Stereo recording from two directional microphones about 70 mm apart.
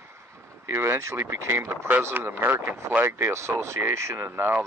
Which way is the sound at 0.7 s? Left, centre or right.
Right.